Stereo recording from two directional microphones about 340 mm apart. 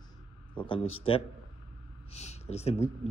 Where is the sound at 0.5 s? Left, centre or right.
Centre.